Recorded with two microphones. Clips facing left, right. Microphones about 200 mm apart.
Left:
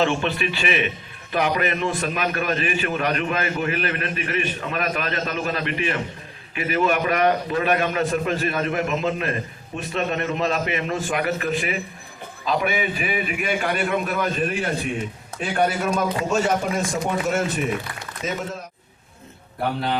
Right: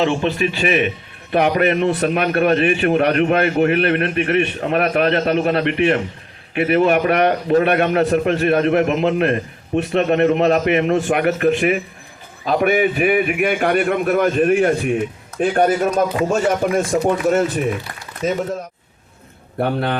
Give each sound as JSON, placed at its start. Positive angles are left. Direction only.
{"t": 0.0, "sound": "a man's voice", "side_deg": -25}
{"t": 1.3, "sound": "a man's voice", "side_deg": -60}
{"t": 16.9, "sound": "a man's voice", "side_deg": -35}
{"t": 19.5, "sound": "a man's voice", "side_deg": -55}